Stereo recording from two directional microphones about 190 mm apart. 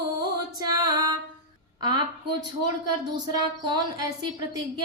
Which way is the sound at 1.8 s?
20° right (ahead or behind).